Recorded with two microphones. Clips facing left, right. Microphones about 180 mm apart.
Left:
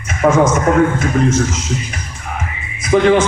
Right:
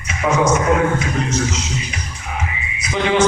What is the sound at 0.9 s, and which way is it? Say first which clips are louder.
A man's voice: left 6 dB; 50° left (ahead or behind).